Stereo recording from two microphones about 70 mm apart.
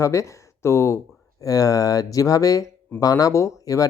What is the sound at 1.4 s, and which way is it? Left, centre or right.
Speech, left.